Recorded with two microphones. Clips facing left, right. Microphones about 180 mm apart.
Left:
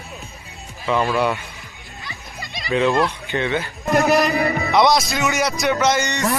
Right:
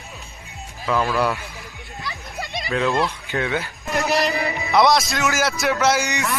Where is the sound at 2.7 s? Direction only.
Centre (ahead or behind).